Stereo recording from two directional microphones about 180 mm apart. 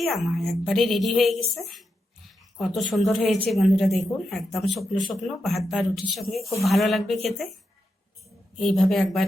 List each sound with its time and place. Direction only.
0.0 s a woman's voice: centre (ahead or behind)
8.5 s a woman's voice: 5° left (ahead or behind)